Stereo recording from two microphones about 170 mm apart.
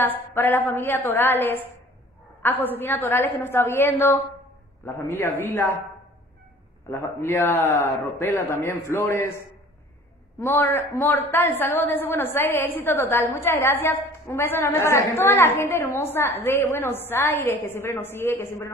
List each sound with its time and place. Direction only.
0.0 s a woman's voice: 15° left (ahead or behind)
6.9 s a woman's voice: 15° left (ahead or behind)
10.4 s a woman's voice: 15° left (ahead or behind)